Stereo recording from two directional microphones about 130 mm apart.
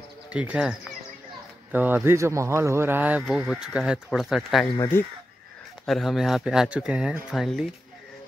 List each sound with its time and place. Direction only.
0.3 s a man's voice: 10° right (ahead or behind)
4.9 s speech: 20° left (ahead or behind)
5.9 s speech: centre (ahead or behind)